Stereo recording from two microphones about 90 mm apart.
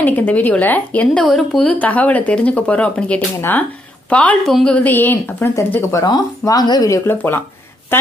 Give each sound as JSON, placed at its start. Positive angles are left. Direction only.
{"t": 0.0, "sound": "a woman's voice", "side_deg": 20}
{"t": 1.2, "sound": "a woman's voice", "side_deg": 5}
{"t": 6.4, "sound": "speech", "side_deg": 50}
{"t": 7.1, "sound": "a woman's voice", "side_deg": 20}